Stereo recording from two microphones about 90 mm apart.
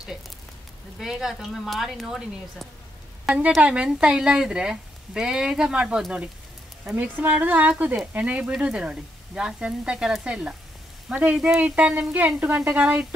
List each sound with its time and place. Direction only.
0.9 s speech: 5° right (ahead or behind)